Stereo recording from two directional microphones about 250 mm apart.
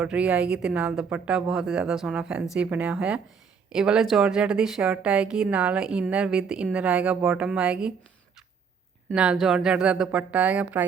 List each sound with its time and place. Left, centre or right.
0.0 s a woman's voice: centre
9.0 s a woman's voice: centre